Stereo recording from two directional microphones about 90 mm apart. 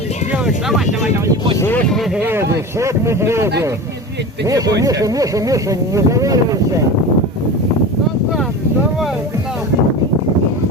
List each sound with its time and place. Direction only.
0.4 s speech: 5° right (ahead or behind)
2.2 s speech: 30° right (ahead or behind)
4.4 s speech: 40° right (ahead or behind)